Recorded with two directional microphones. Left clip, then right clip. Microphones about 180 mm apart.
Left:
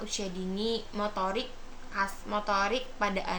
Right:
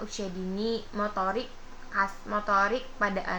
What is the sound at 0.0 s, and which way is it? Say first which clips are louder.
A woman's voice: even; 20° left (ahead or behind).